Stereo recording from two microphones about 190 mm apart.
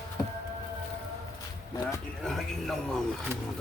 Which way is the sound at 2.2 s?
Centre (ahead or behind).